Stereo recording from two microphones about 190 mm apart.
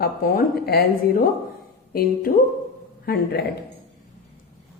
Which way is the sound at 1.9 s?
55° left (ahead or behind).